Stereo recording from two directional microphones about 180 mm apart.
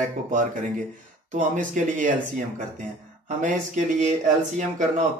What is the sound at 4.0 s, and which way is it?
Speech, 40° right (ahead or behind).